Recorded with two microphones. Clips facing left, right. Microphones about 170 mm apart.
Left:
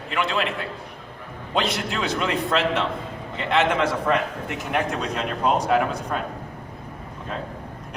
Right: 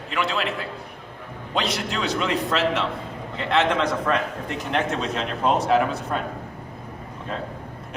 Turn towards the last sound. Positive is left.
turn(degrees=0)  # may be behind; listen again after turning